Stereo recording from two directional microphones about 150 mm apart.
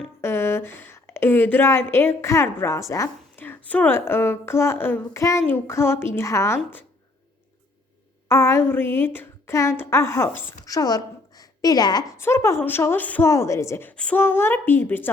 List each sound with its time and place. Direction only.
0.2 s a woman's voice: 15° left (ahead or behind)
8.3 s a woman's voice: 15° left (ahead or behind)